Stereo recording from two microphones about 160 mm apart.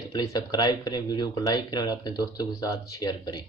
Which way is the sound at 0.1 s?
25° left (ahead or behind).